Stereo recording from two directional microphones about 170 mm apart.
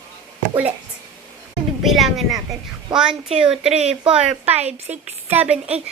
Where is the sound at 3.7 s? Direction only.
40° right (ahead or behind).